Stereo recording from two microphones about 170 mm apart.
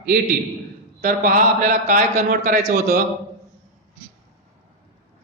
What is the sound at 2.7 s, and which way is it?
Speech, 65° right (ahead or behind).